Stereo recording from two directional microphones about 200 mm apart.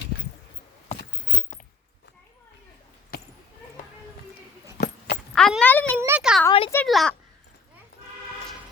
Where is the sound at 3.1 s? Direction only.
50° left (ahead or behind).